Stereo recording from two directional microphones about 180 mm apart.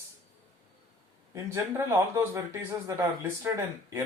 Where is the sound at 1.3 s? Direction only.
15° right (ahead or behind).